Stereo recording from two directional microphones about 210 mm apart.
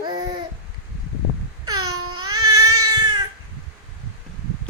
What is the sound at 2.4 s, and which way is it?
Cat, 90° right.